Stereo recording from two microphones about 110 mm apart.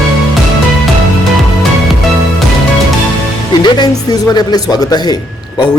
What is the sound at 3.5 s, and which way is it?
Speech, 45° left (ahead or behind).